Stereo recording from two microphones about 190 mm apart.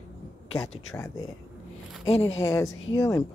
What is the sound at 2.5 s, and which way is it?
Speech, 15° left (ahead or behind).